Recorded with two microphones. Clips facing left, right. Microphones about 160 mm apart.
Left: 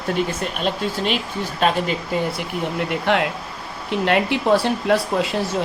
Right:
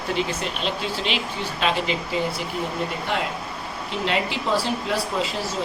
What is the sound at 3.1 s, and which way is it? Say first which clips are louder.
Speech: left 6 dB; 65° left (ahead or behind).